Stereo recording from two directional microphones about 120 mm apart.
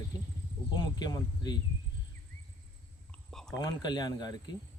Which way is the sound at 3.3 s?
5° left (ahead or behind).